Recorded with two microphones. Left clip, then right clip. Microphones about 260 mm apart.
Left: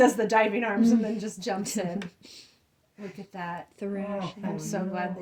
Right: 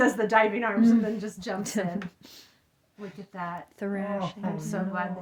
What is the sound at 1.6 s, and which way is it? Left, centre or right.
Speech, right.